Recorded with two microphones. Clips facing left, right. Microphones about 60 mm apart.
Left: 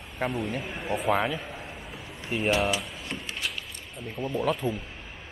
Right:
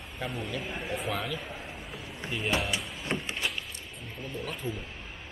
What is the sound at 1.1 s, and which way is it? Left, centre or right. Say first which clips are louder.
Speech: left 10 dB; left.